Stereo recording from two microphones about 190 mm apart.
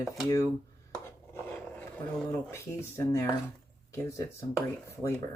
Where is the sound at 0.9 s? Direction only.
10° left (ahead or behind).